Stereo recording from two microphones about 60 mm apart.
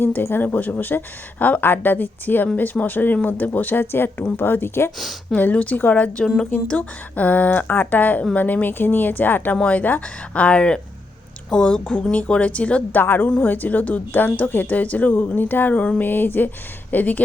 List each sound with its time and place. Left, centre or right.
0.0 s a woman's voice: left
0.4 s a woman's voice: left
5.3 s speech: left
6.2 s a woman's voice: centre
6.7 s a woman's voice: left
13.0 s a woman's voice: left